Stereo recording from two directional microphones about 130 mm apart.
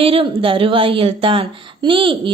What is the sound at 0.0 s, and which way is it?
A woman's voice, 45° right (ahead or behind).